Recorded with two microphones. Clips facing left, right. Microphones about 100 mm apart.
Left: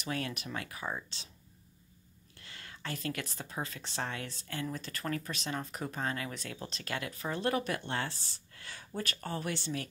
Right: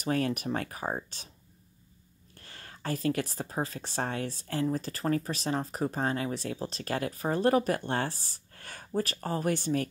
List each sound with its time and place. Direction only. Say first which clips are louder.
0.0 s speech: right 8 dB; 40° right (ahead or behind)
2.3 s speech: right 2 dB; 40° right (ahead or behind)